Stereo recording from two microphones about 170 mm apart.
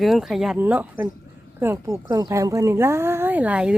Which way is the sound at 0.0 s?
Centre (ahead or behind).